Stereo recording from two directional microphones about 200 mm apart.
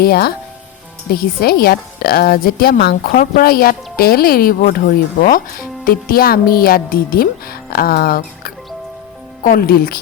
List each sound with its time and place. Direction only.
0.0 s speech: 50° left (ahead or behind)